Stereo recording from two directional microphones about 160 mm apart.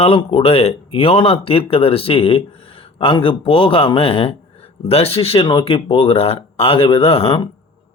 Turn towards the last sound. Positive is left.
turn(degrees=35)  # may be behind; listen again after turning